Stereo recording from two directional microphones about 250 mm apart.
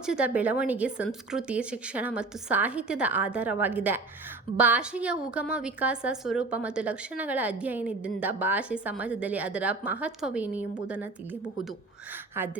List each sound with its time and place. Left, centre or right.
0.0 s a woman's voice: centre
12.4 s speech: centre